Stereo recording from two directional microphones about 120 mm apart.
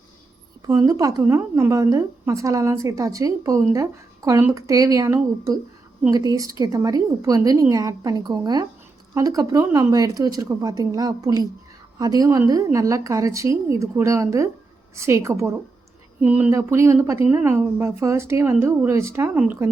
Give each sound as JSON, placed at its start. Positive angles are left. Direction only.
{"t": 0.7, "sound": "a woman's voice", "side_deg": -30}
{"t": 16.2, "sound": "speech", "side_deg": -15}
{"t": 16.5, "sound": "a woman's voice", "side_deg": -25}